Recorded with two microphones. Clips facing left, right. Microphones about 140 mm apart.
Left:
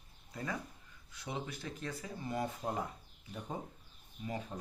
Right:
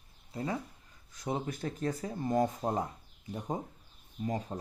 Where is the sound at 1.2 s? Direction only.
45° right (ahead or behind).